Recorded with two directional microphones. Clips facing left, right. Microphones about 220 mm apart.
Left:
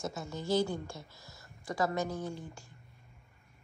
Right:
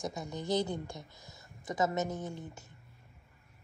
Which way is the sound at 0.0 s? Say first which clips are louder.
Even; 15° right (ahead or behind).